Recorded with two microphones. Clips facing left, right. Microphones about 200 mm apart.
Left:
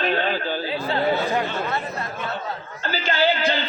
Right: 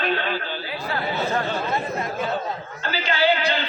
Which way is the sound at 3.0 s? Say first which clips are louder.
Even; 45° left (ahead or behind).